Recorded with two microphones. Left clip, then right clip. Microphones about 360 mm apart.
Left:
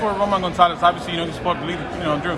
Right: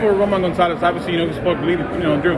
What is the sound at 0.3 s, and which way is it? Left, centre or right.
A man's voice, centre.